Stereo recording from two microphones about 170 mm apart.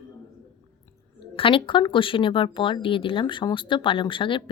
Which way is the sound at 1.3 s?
30° left (ahead or behind).